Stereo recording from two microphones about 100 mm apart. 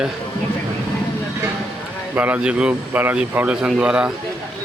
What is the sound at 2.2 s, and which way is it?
A man's voice, 15° right (ahead or behind).